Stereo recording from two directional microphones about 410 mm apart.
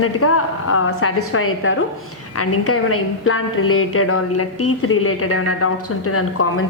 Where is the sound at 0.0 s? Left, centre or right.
Left.